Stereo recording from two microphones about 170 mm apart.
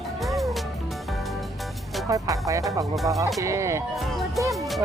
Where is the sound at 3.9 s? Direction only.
Centre (ahead or behind).